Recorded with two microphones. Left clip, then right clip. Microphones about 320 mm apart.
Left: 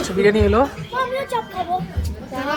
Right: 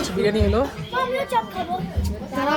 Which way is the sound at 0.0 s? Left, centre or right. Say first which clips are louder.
Left 5 dB; centre.